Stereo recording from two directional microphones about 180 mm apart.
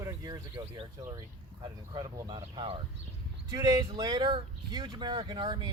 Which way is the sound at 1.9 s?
25° right (ahead or behind).